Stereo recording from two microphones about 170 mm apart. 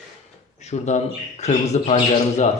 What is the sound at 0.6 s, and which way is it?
Speech, 40° left (ahead or behind).